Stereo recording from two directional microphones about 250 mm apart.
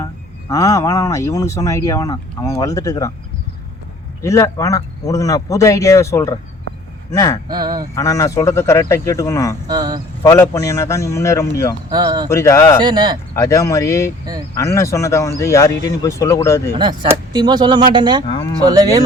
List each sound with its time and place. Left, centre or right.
0.5 s speech: centre
4.2 s speech: centre
7.4 s speech: centre
7.9 s speech: centre
9.6 s speech: centre
10.2 s speech: centre
11.9 s speech: centre
12.3 s speech: centre
12.8 s speech: centre
13.3 s speech: centre
16.7 s speech: centre
18.3 s speech: centre
18.6 s speech: centre